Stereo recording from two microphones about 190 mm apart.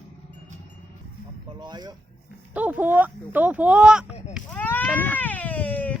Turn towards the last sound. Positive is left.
turn(degrees=10)  # may be behind; listen again after turning